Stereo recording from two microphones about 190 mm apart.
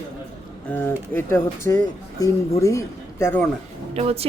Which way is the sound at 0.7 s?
10° left (ahead or behind).